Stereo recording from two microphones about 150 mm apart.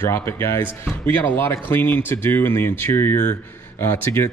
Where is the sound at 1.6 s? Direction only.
15° left (ahead or behind).